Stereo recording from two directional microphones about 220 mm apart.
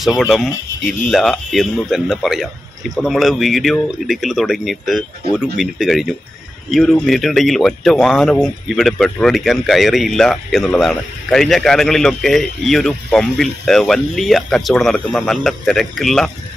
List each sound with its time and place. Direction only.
0.2 s speech: centre (ahead or behind)